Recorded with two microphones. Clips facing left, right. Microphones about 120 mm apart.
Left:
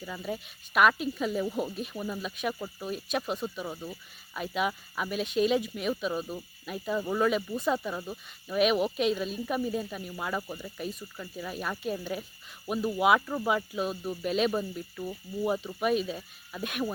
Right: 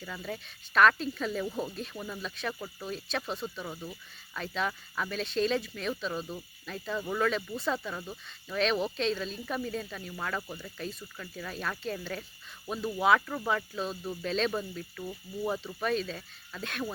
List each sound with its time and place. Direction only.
0.0 s speech: 10° left (ahead or behind)